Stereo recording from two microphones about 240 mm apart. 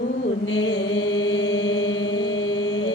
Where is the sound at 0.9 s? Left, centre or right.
Left.